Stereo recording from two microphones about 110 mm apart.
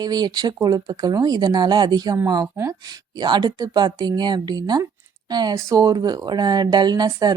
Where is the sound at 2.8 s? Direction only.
40° right (ahead or behind).